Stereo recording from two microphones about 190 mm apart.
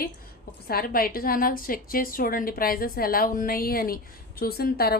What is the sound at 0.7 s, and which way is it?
A woman's voice, 50° left (ahead or behind).